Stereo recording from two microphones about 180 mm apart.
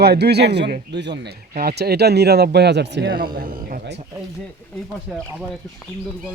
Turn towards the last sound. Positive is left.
turn(degrees=0)  # may be behind; listen again after turning